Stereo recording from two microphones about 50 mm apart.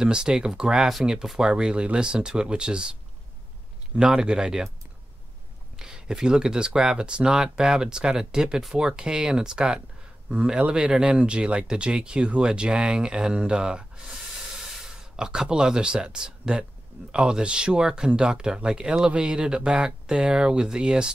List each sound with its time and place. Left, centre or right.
0.0 s speech: centre
4.1 s speech: centre
5.8 s speech: centre
15.1 s speech: centre